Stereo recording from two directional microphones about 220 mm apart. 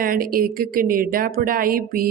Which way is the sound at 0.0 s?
40° right (ahead or behind).